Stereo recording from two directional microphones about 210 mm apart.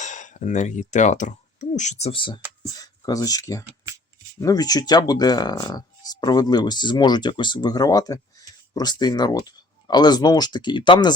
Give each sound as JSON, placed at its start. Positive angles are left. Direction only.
{"t": 0.0, "sound": "speech", "side_deg": 35}